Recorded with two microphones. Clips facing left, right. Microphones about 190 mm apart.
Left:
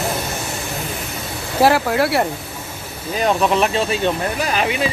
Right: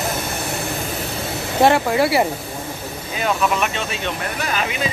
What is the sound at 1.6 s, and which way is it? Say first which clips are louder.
Speech: even; centre (ahead or behind).